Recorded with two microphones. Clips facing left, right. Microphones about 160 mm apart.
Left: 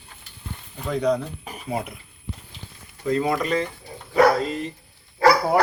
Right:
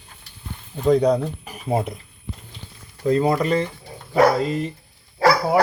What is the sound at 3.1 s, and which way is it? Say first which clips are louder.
Speech: right 3 dB; 35° right (ahead or behind).